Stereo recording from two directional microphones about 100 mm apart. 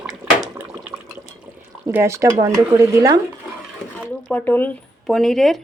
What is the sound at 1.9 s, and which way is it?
Speech, 30° right (ahead or behind).